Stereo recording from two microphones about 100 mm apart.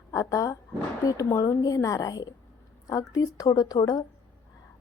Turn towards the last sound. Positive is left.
turn(degrees=40)  # may be behind; listen again after turning